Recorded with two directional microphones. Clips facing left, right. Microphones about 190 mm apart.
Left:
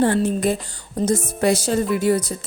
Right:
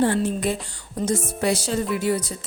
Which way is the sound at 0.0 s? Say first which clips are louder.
Left 3 dB; 45° left (ahead or behind).